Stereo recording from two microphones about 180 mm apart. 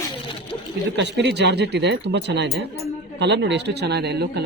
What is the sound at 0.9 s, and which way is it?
Speech, 75° right (ahead or behind).